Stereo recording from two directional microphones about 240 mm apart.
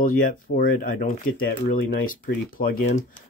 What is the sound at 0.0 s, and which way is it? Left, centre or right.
Speech, left.